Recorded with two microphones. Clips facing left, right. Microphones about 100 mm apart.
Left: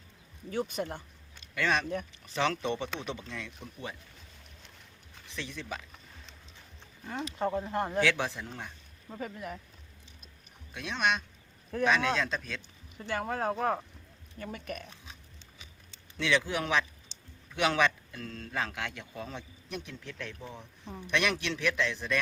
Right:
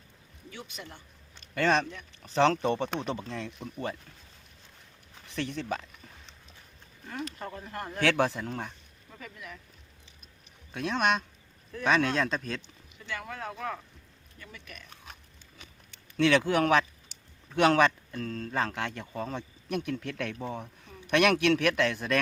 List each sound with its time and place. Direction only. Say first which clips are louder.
0.5 s speech: left 11 dB; 45° left (ahead or behind)
1.5 s a man's voice: right 3 dB; 40° right (ahead or behind)
5.3 s a man's voice: right 7 dB; 50° right (ahead or behind)
7.3 s speech: left 8 dB; 25° left (ahead or behind)
8.0 s a man's voice: right 4 dB; 50° right (ahead or behind)
9.0 s speech: left 6 dB; 40° left (ahead or behind)
10.8 s a man's voice: right 3 dB; 45° right (ahead or behind)
12.6 s speech: left 4 dB; 40° left (ahead or behind)
16.1 s a man's voice: right 6 dB; 55° right (ahead or behind)